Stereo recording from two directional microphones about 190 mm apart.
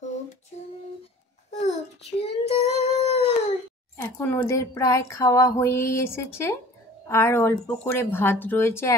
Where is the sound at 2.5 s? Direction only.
35° left (ahead or behind).